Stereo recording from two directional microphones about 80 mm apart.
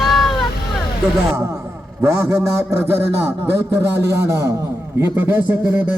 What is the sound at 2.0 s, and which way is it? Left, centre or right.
A man's voice, right.